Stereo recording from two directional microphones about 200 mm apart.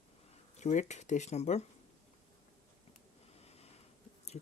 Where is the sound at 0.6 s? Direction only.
35° left (ahead or behind).